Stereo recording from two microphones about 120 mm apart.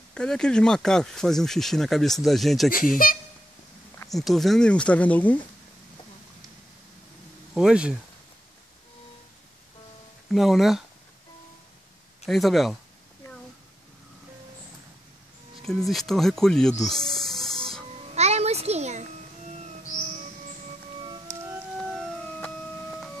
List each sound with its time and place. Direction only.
0.1 s speech: 5° left (ahead or behind)
4.1 s speech: centre (ahead or behind)
7.5 s speech: 5° right (ahead or behind)
10.3 s speech: centre (ahead or behind)
12.3 s speech: centre (ahead or behind)
15.6 s speech: 5° left (ahead or behind)
16.8 s rub: 5° left (ahead or behind)
18.1 s music: 65° right (ahead or behind)
21.7 s music: centre (ahead or behind)